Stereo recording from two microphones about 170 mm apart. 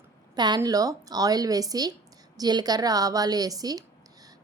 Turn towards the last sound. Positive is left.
turn(degrees=-20)  # may be behind; listen again after turning